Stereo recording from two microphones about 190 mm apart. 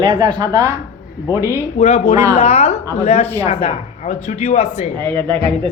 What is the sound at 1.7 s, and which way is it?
Speech, 35° left (ahead or behind).